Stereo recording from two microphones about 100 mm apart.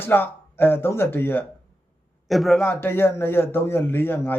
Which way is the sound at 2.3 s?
Centre (ahead or behind).